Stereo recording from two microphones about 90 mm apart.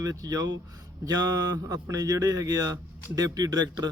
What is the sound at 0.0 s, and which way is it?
A man's voice, 40° right (ahead or behind).